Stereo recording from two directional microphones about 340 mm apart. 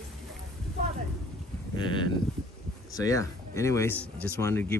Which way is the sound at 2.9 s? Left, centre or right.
Centre.